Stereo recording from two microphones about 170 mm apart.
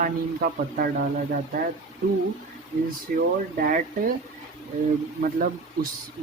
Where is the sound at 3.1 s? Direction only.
55° right (ahead or behind).